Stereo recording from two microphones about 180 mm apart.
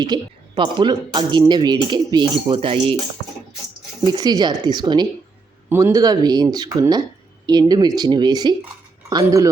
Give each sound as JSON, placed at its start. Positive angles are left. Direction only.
{"t": 0.0, "sound": "speech", "side_deg": -25}
{"t": 4.0, "sound": "speech", "side_deg": -25}